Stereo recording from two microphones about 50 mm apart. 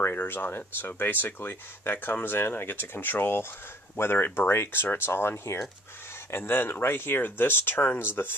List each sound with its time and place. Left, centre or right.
0.0 s speech: left